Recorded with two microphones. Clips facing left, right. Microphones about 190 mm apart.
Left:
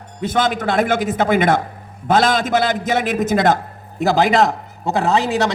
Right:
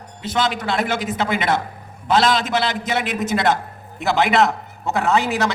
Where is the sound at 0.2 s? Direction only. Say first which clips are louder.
Left 3 dB; 50° left (ahead or behind).